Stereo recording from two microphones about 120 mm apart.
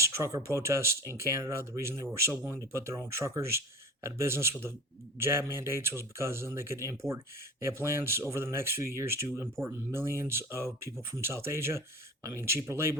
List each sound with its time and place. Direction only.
0.0 s speech: 25° right (ahead or behind)